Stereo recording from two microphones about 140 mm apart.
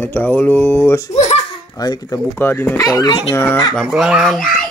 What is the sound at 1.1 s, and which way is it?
Giggle, 55° left (ahead or behind).